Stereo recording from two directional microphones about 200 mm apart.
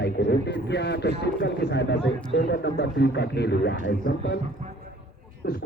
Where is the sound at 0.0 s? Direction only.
60° left (ahead or behind).